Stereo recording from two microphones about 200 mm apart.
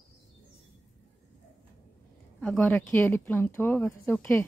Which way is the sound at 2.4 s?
5° left (ahead or behind).